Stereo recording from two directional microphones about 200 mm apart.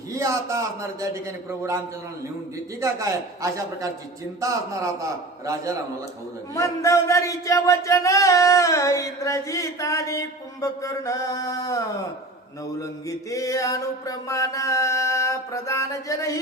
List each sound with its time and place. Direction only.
0.2 s a man's voice: 15° right (ahead or behind)
2.8 s a man's voice: 15° right (ahead or behind)
6.5 s speech: 15° left (ahead or behind)
12.8 s speech: 15° left (ahead or behind)